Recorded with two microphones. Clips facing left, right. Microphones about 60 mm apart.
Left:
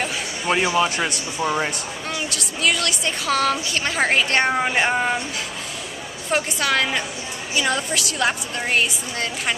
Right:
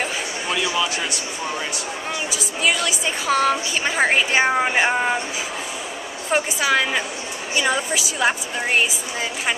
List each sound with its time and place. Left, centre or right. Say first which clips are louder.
0.5 s a man's voice: left 4 dB; left
1.4 s speech: left 7 dB; left
2.2 s speech: right 1 dB; centre
6.3 s speech: right 2 dB; centre